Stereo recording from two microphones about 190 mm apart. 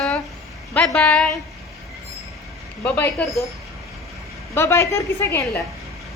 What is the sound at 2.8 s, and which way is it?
Speech, 5° left (ahead or behind).